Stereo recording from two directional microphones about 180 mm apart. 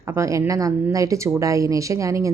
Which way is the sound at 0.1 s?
15° right (ahead or behind).